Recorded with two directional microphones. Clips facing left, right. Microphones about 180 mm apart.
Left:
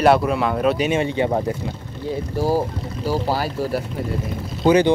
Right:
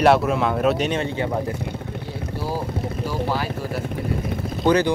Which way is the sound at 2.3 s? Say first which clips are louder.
Left 6 dB; 40° left (ahead or behind).